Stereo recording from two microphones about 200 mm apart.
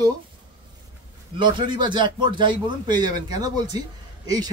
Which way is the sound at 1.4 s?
25° right (ahead or behind).